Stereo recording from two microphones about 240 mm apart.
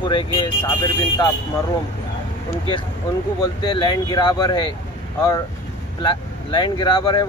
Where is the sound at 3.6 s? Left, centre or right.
Centre.